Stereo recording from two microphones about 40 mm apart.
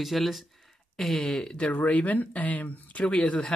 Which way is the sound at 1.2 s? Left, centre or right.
Centre.